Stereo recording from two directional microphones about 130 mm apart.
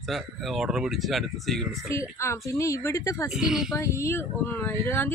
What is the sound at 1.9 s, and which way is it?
A woman's voice, 20° left (ahead or behind).